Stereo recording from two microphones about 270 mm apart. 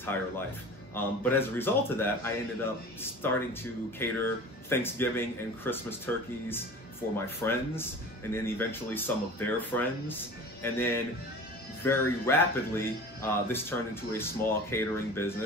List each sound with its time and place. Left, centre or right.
0.9 s speech: centre